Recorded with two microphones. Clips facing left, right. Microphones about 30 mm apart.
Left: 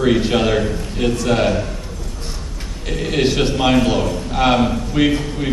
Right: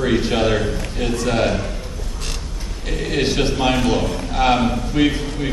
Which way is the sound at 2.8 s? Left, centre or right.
Centre.